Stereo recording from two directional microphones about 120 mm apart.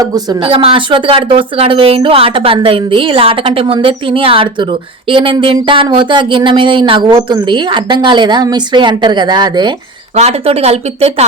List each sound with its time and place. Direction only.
0.0 s speech: 30° right (ahead or behind)
0.3 s speech: 50° right (ahead or behind)
10.2 s speech: 60° right (ahead or behind)